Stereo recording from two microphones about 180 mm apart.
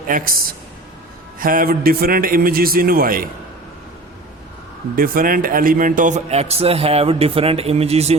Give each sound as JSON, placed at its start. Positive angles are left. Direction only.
{"t": 0.1, "sound": "a man's voice", "side_deg": -55}
{"t": 4.9, "sound": "a man's voice", "side_deg": -55}